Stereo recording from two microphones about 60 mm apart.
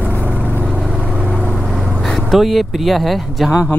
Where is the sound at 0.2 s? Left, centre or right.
Right.